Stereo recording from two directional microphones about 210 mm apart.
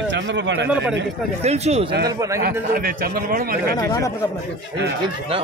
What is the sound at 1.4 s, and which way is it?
Speech, 30° right (ahead or behind).